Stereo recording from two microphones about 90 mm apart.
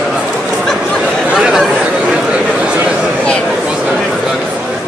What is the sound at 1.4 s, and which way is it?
Chatter, 10° right (ahead or behind).